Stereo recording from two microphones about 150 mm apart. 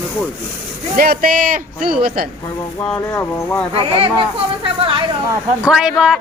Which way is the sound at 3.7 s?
40° right (ahead or behind).